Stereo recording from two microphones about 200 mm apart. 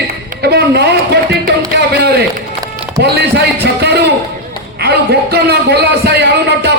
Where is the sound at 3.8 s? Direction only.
55° right (ahead or behind).